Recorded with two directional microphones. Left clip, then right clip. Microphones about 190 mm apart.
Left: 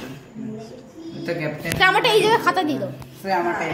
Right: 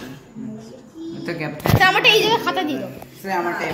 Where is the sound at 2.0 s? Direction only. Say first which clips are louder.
Right 1 dB; 10° left (ahead or behind).